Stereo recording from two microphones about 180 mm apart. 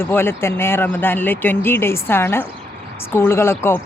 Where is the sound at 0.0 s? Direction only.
10° left (ahead or behind).